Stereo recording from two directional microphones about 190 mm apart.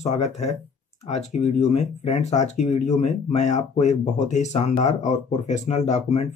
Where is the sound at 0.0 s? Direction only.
35° left (ahead or behind).